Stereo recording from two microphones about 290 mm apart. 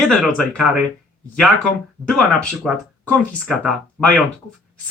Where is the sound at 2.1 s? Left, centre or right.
Centre.